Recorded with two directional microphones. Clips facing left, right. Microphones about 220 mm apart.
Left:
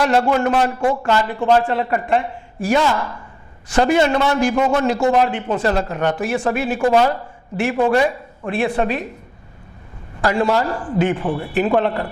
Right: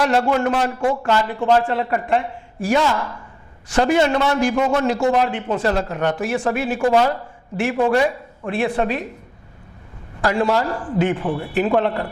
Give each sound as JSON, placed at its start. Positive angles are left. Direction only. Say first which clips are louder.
{"t": 0.0, "sound": "a man's voice", "louder": "left 1 dB", "side_deg": 15}
{"t": 4.5, "sound": "a man's voice", "louder": "left 1 dB", "side_deg": 25}
{"t": 10.2, "sound": "a man's voice", "louder": "left 1 dB", "side_deg": 20}